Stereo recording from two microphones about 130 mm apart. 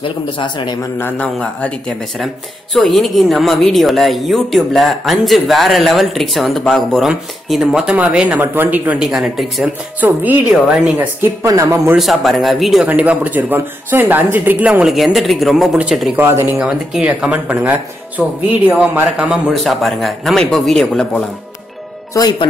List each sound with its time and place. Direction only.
0.0 s a man's voice: 40° left (ahead or behind)
0.9 s a man's voice: 15° left (ahead or behind)
2.7 s a woman's voice: centre (ahead or behind)
9.9 s speech: 15° right (ahead or behind)
11.4 s speech: 25° right (ahead or behind)
12.0 s a woman's voice: centre (ahead or behind)
16.2 s speech: 20° right (ahead or behind)
16.5 s a woman's voice: 5° right (ahead or behind)